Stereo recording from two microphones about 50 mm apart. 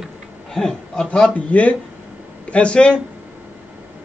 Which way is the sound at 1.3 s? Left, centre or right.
Left.